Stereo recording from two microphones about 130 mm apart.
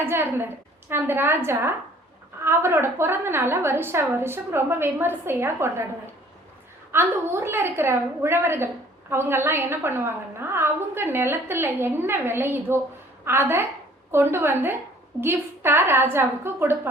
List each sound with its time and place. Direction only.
0.0 s a woman's voice: 15° right (ahead or behind)
6.9 s a woman's voice: 20° right (ahead or behind)